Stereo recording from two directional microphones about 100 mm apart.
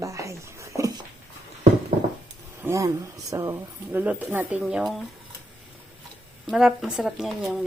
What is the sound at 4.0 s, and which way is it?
Speech, 15° right (ahead or behind).